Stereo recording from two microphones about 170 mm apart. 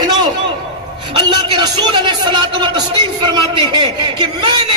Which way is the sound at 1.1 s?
25° right (ahead or behind).